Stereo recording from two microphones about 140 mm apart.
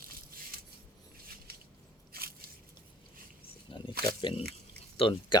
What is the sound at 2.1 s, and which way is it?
Squish, 90° right.